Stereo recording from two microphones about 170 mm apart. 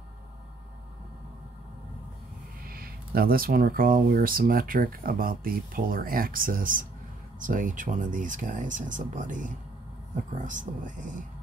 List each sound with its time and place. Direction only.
2.6 s speech: 60° right (ahead or behind)